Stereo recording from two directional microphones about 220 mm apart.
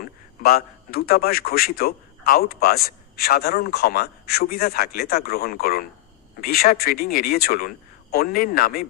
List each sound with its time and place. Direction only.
0.0 s a man's voice: 45° left (ahead or behind)